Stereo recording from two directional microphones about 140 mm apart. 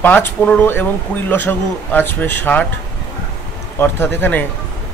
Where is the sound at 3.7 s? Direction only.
15° left (ahead or behind).